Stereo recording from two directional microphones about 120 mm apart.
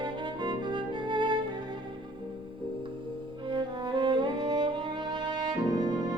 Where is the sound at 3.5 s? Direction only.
40° right (ahead or behind).